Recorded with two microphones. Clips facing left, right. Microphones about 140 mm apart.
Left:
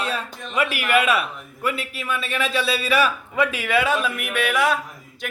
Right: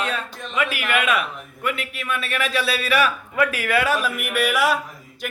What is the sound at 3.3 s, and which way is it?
Speech, 20° left (ahead or behind).